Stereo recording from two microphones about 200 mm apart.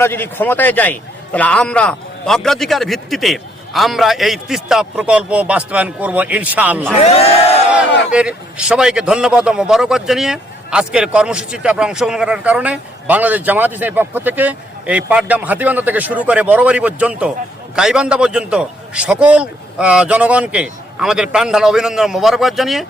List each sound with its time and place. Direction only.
0.0 s a man's voice: 10° left (ahead or behind); by 6.8 s 10° right (ahead or behind)
7.0 s speech: 30° left (ahead or behind)
8.1 s a man's voice: 5° right (ahead or behind)